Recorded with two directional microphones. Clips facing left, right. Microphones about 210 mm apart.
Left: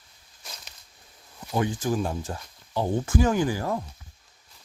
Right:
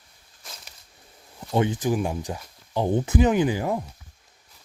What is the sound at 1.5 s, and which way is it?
Speech, 20° right (ahead or behind).